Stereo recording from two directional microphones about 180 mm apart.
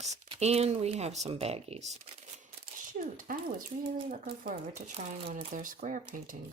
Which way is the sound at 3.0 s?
50° right (ahead or behind).